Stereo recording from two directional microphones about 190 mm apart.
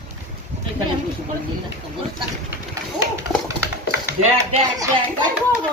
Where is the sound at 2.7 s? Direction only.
15° right (ahead or behind).